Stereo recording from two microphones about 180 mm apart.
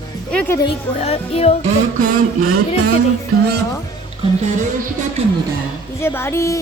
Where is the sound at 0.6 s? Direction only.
35° left (ahead or behind).